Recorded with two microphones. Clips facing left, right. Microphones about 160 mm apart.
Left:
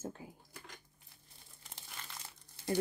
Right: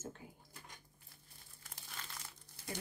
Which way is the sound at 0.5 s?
90° left.